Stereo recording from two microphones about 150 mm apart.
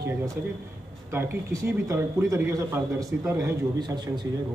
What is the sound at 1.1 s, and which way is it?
Speech, 15° right (ahead or behind).